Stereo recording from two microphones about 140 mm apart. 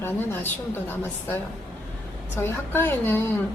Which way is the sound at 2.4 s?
15° left (ahead or behind).